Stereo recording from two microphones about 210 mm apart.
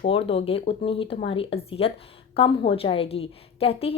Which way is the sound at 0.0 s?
25° left (ahead or behind).